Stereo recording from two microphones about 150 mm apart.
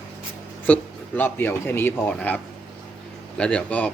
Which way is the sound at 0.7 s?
10° left (ahead or behind).